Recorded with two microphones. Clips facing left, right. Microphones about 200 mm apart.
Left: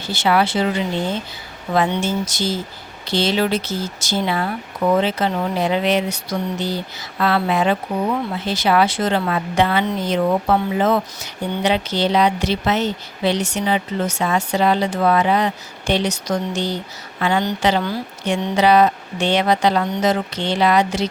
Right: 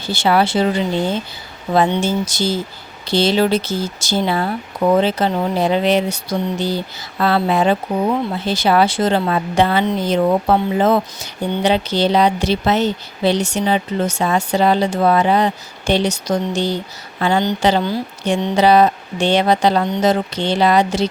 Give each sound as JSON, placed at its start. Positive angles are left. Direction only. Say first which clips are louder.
{"t": 0.1, "sound": "speech", "louder": "right 2 dB", "side_deg": -30}
{"t": 1.7, "sound": "a woman's voice", "louder": "right 3 dB", "side_deg": -30}